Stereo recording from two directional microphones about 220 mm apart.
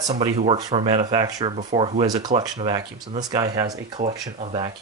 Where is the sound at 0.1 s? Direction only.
30° right (ahead or behind).